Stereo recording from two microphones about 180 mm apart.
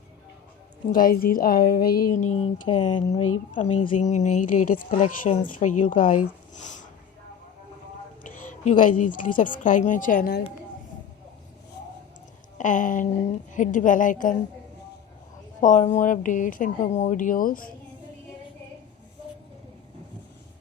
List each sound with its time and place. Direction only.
0.9 s speech: 50° left (ahead or behind)
2.1 s a woman's voice: 40° left (ahead or behind)
8.2 s speech: 45° left (ahead or behind)
12.5 s a woman's voice: 45° left (ahead or behind)
15.6 s speech: 40° left (ahead or behind)